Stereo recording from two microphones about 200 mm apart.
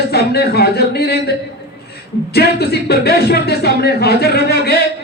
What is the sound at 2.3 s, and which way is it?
Speech, 55° left (ahead or behind).